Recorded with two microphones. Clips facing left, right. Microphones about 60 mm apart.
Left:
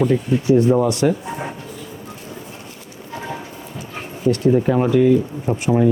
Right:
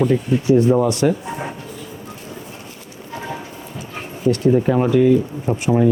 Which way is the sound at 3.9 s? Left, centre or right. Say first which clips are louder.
Even; centre.